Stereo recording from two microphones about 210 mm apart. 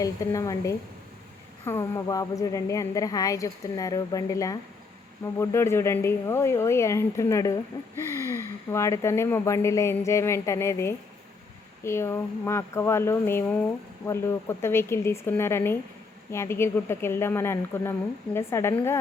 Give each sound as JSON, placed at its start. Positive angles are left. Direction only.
{"t": 0.0, "sound": "speech", "side_deg": 15}